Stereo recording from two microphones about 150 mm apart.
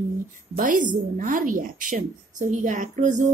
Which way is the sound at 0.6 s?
60° right (ahead or behind).